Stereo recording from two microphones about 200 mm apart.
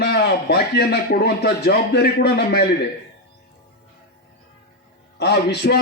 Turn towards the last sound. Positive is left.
turn(degrees=55)  # may be behind; listen again after turning